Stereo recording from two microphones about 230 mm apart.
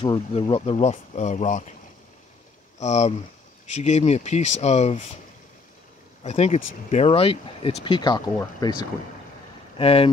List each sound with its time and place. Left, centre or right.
0.0 s speech: left
2.8 s speech: left
6.2 s speech: left
9.8 s speech: left